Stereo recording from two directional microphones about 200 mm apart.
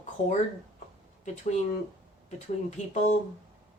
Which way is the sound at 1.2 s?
35° left (ahead or behind).